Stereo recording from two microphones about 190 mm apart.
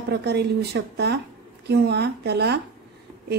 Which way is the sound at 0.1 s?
65° right (ahead or behind).